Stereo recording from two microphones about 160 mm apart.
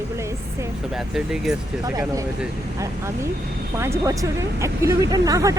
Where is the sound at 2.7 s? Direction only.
20° right (ahead or behind).